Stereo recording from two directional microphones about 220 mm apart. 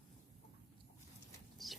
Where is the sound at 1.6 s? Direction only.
Centre (ahead or behind).